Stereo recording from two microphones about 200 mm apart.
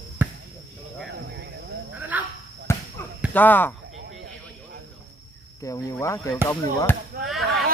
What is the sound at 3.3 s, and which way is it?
Speech, 10° left (ahead or behind).